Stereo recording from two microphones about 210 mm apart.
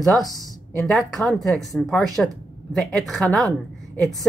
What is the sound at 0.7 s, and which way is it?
Speech, centre (ahead or behind).